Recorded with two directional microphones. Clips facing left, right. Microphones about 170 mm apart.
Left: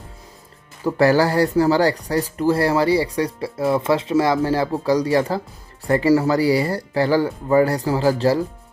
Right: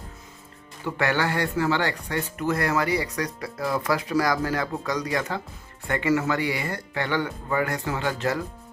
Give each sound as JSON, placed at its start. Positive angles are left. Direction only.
{"t": 0.9, "sound": "speech", "side_deg": 35}